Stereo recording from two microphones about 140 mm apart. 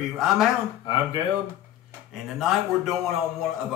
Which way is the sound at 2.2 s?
Centre (ahead or behind).